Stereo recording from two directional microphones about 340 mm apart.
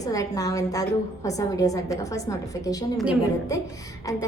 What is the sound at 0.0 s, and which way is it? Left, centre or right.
A woman's voice, centre.